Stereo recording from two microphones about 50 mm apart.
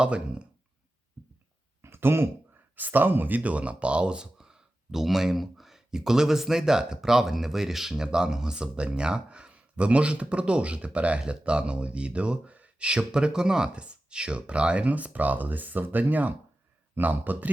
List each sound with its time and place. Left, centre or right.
0.0 s speech: right
1.8 s throat clearing: right
2.7 s speech: right